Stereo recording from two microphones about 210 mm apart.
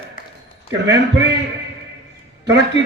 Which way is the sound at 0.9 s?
55° right (ahead or behind).